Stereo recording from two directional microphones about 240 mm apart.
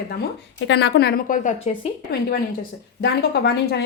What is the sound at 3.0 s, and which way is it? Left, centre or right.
Speech, left.